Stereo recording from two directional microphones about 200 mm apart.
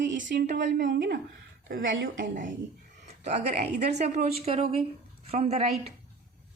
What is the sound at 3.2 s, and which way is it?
A woman's voice, 35° right (ahead or behind).